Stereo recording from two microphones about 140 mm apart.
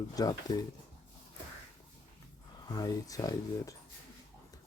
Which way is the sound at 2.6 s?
25° left (ahead or behind).